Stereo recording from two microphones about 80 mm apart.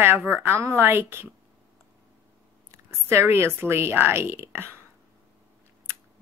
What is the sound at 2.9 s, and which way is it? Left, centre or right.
A woman's voice, right.